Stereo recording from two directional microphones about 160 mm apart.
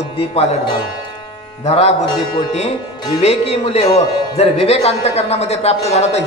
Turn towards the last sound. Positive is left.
turn(degrees=40)  # may be behind; listen again after turning